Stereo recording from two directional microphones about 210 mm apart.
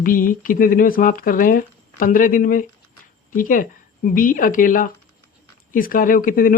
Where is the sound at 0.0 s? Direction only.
40° left (ahead or behind).